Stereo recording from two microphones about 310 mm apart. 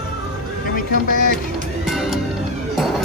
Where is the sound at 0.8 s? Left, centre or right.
Left.